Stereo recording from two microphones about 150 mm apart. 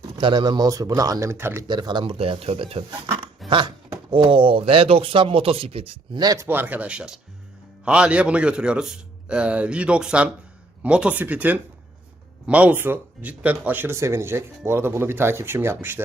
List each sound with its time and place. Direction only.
0.2 s speech: 30° right (ahead or behind)
1.6 s speech: 30° right (ahead or behind)
3.4 s dog: centre (ahead or behind)
4.1 s speech: 35° right (ahead or behind); by 16.0 s 15° right (ahead or behind)